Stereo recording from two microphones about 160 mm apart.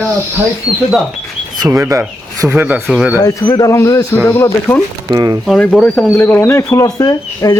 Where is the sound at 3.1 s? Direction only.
25° left (ahead or behind).